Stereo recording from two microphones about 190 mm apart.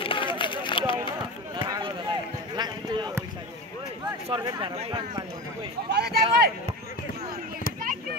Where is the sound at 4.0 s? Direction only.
20° right (ahead or behind).